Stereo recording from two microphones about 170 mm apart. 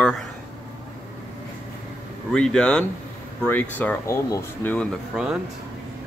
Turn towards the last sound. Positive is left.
turn(degrees=-5)  # may be behind; listen again after turning